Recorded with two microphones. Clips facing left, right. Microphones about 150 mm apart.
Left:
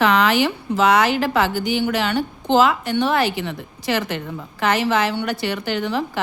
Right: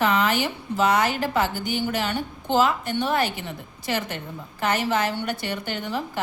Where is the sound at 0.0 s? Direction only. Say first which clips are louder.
Left 5 dB; 85° left.